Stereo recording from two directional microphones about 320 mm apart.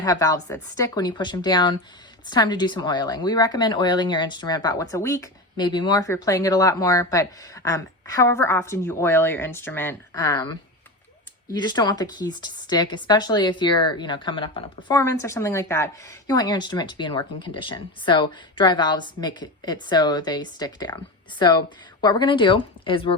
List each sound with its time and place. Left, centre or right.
0.0 s speech: centre